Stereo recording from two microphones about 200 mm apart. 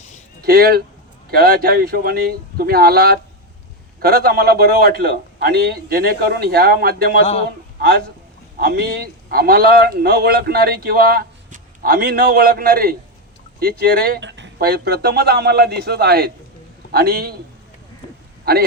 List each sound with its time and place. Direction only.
0.4 s a man's voice: 50° right (ahead or behind)
18.5 s a man's voice: 50° right (ahead or behind)